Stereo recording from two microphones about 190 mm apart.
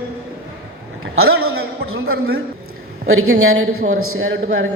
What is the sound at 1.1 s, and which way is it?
A man's voice, 90° right.